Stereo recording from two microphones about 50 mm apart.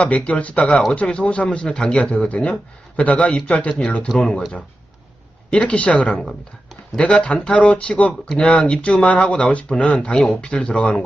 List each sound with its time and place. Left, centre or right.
0.0 s speech: left
5.5 s speech: left